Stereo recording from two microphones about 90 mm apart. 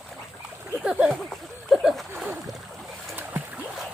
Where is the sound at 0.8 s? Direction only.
10° right (ahead or behind).